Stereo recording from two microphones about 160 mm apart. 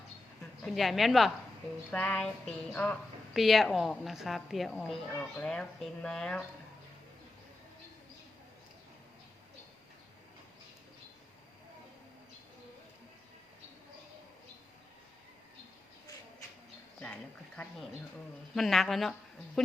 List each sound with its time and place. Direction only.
0.6 s a woman's voice: centre (ahead or behind)
18.5 s a woman's voice: centre (ahead or behind)